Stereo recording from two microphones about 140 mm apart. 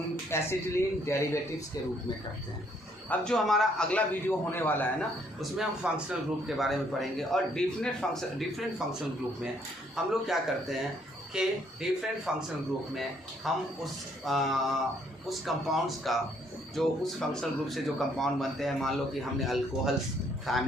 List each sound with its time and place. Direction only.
0.3 s a man's voice: 20° left (ahead or behind)
3.1 s a man's voice: 5° left (ahead or behind)
5.4 s speech: 5° right (ahead or behind)